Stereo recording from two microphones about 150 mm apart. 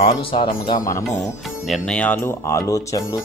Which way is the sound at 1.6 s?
5° left (ahead or behind).